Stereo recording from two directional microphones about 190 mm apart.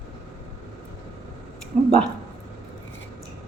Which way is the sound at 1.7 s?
35° right (ahead or behind).